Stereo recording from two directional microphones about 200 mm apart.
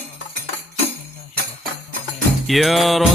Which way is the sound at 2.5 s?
Centre (ahead or behind).